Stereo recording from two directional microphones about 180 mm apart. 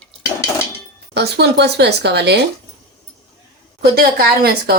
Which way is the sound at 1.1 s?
70° right (ahead or behind).